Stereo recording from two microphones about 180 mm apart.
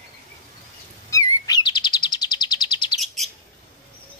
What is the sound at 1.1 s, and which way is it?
Chirp, 20° left (ahead or behind).